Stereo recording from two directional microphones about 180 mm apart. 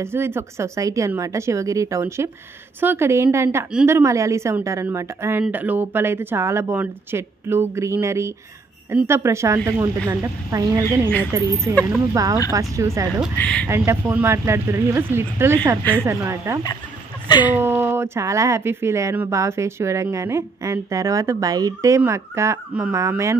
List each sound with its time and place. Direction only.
0.0 s speech: 15° right (ahead or behind)
13.4 s speech: 10° left (ahead or behind)
13.7 s speech: 15° right (ahead or behind)
17.3 s speech: 25° left (ahead or behind)
17.6 s speech: 10° right (ahead or behind)